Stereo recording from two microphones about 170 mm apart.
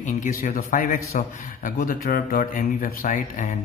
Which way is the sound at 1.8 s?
60° left (ahead or behind).